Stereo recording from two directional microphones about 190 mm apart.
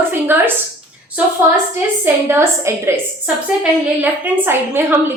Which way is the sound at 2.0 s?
10° right (ahead or behind).